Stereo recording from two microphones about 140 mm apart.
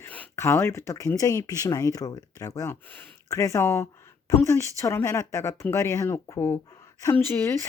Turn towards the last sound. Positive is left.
turn(degrees=20)  # may be behind; listen again after turning